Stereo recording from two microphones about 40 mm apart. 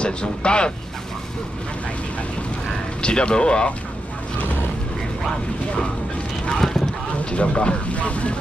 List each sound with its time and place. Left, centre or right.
0.0 s speech: left
3.0 s speech: left
7.2 s speech: left